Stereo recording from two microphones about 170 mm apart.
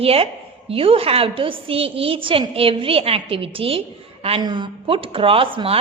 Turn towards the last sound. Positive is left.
turn(degrees=-30)  # may be behind; listen again after turning